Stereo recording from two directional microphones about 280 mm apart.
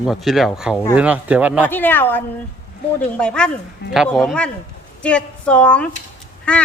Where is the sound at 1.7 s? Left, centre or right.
Centre.